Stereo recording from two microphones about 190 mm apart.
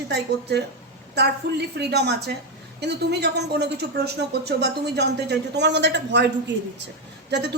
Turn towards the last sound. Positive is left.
turn(degrees=-65)  # may be behind; listen again after turning